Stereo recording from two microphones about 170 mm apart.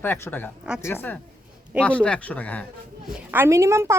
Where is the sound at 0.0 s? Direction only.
10° left (ahead or behind).